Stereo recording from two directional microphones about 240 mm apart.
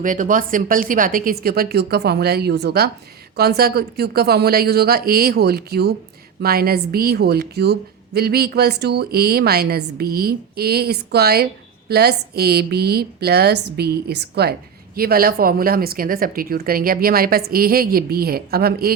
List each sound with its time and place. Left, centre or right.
0.0 s a woman's voice: right